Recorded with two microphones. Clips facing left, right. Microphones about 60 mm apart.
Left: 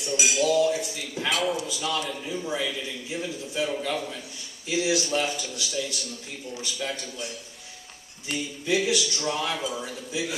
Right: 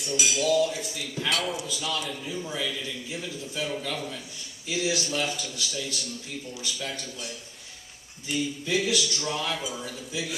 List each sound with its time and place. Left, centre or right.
0.1 s cutlery: left
0.4 s a man's voice: centre
1.3 s a man's voice: centre
2.3 s a man's voice: centre
5.0 s a man's voice: centre
8.6 s a man's voice: centre